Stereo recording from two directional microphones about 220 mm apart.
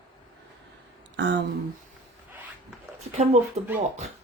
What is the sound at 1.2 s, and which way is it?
Speech, 55° right (ahead or behind).